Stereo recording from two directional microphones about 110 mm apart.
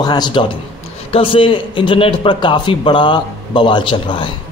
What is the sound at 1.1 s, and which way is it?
A man's voice, 55° left (ahead or behind).